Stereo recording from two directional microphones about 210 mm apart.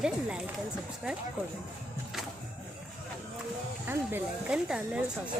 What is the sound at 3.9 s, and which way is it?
Speech, 5° right (ahead or behind).